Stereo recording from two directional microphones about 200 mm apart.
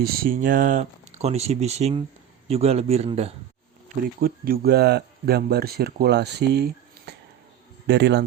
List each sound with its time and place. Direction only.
0.0 s speech: 50° right (ahead or behind); by 3.3 s 30° right (ahead or behind)
3.8 s a man's voice: 45° right (ahead or behind)